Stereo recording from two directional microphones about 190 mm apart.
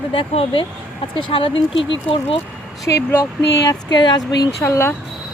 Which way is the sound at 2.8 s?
15° left (ahead or behind).